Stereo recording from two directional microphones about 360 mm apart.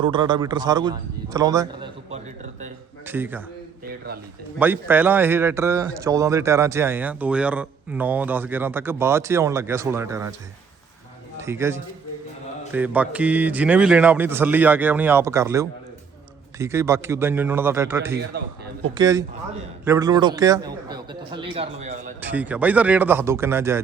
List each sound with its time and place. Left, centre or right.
0.0 s a man's voice: centre
3.1 s a man's voice: centre
4.6 s a man's voice: centre
11.3 s a man's voice: centre
18.2 s a man's voice: right
18.9 s a man's voice: centre
22.2 s a man's voice: centre